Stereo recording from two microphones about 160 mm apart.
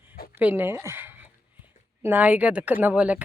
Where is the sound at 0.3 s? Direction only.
10° right (ahead or behind).